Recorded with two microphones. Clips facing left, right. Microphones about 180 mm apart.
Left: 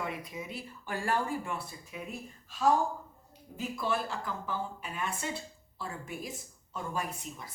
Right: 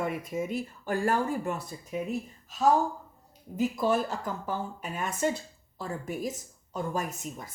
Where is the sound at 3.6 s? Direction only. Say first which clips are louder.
Right 7 dB; 40° right (ahead or behind).